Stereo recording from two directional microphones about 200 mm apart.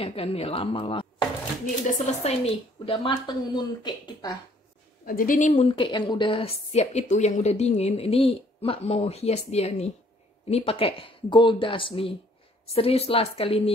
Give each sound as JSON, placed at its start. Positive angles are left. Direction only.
{"t": 0.0, "sound": "a woman's voice", "side_deg": 30}
{"t": 5.0, "sound": "a woman's voice", "side_deg": 45}